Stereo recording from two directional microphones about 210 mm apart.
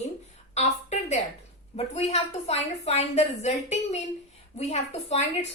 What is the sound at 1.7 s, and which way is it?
A woman's voice, 30° left (ahead or behind).